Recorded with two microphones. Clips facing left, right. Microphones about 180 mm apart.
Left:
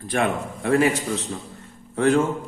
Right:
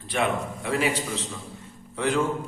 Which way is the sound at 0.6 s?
50° left (ahead or behind).